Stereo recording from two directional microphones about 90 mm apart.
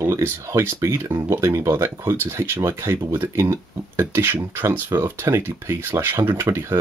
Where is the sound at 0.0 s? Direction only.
30° right (ahead or behind).